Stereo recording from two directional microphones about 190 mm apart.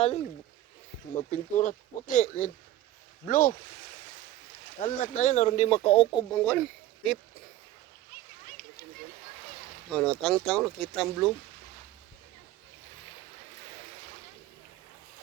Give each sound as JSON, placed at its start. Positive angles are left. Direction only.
{"t": 1.1, "sound": "speech", "side_deg": 40}
{"t": 4.8, "sound": "speech", "side_deg": 45}
{"t": 6.4, "sound": "speech", "side_deg": 10}
{"t": 9.9, "sound": "speech", "side_deg": 5}